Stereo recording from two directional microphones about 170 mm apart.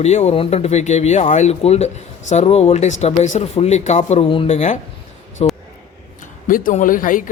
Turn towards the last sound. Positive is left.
turn(degrees=50)  # may be behind; listen again after turning